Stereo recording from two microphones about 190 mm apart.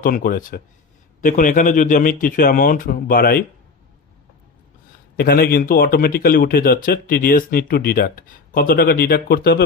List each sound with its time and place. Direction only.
0.0 s speech: 50° left (ahead or behind)
5.1 s speech: 50° left (ahead or behind)